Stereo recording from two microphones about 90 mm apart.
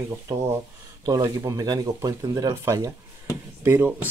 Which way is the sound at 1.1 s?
40° right (ahead or behind).